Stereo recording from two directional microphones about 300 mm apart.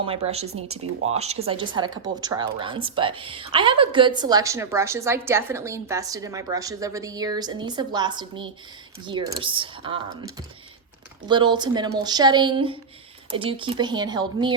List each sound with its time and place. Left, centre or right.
0.0 s a woman's voice: centre
11.3 s a woman's voice: centre